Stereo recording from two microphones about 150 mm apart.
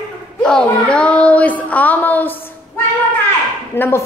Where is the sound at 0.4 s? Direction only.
5° left (ahead or behind).